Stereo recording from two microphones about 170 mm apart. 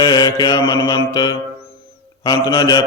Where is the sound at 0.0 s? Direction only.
25° left (ahead or behind).